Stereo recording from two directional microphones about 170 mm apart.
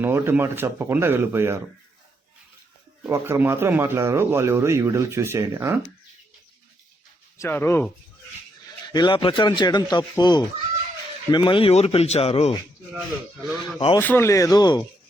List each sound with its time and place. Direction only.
0.0 s speech: 15° right (ahead or behind)
3.1 s speech: 15° right (ahead or behind)
7.3 s speech: 10° left (ahead or behind)
8.9 s speech: 25° left (ahead or behind)
13.7 s speech: 25° left (ahead or behind)
14.0 s speech: 15° left (ahead or behind)